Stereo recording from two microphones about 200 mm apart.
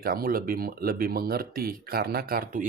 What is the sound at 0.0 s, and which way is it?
Speech, 45° right (ahead or behind).